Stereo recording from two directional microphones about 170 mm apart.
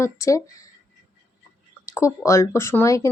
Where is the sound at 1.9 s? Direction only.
20° left (ahead or behind).